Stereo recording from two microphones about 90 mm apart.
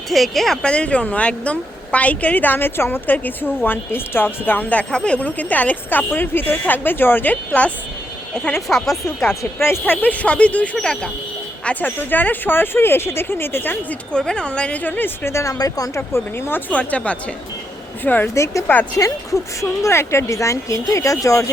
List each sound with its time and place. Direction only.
0.1 s speech: centre (ahead or behind); by 7.7 s 15° left (ahead or behind)
8.6 s speech: centre (ahead or behind)
9.6 s speech: 25° left (ahead or behind)
14.1 s speech: 10° left (ahead or behind); by 15.5 s 30° left (ahead or behind)
15.5 s speech: 40° left (ahead or behind)
16.0 s speech: 25° left (ahead or behind)
18.3 s speech: 30° left (ahead or behind)